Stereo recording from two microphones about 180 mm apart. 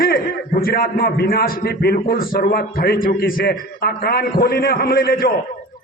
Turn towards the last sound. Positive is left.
turn(degrees=55)  # may be behind; listen again after turning